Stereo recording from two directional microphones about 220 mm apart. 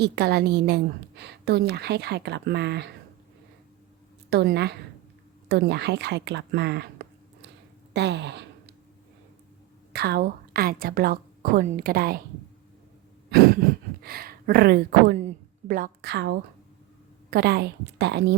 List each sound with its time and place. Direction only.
0.0 s a woman's voice: 45° right (ahead or behind)
4.3 s a woman's voice: 50° right (ahead or behind)
7.9 s a sound: 50° right (ahead or behind)
9.9 s a woman's voice: 45° right (ahead or behind)
14.0 s a woman's voice: 45° right (ahead or behind)